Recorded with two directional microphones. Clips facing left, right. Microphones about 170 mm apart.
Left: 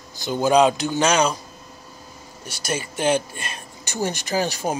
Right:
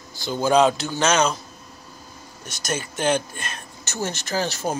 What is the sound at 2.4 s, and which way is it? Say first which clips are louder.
Speech: left 1 dB; 10° left (ahead or behind).